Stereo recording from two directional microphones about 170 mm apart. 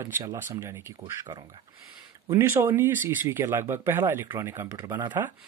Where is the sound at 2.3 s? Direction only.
15° right (ahead or behind).